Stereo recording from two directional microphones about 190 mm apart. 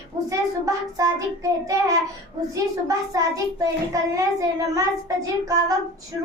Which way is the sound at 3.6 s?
15° right (ahead or behind).